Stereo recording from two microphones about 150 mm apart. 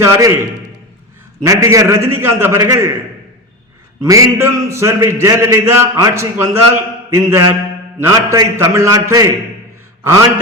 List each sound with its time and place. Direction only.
0.0 s a man's voice: 20° right (ahead or behind)
1.4 s a man's voice: 20° right (ahead or behind)
4.0 s a man's voice: 20° right (ahead or behind)